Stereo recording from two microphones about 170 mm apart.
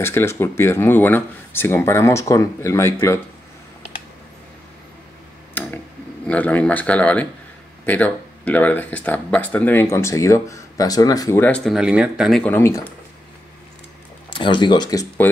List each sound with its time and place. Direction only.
0.0 s speech: 15° left (ahead or behind)
5.5 s a sound: 10° left (ahead or behind)
6.2 s speech: 10° left (ahead or behind)
12.5 s speech: 15° left (ahead or behind)
14.3 s speech: 30° left (ahead or behind)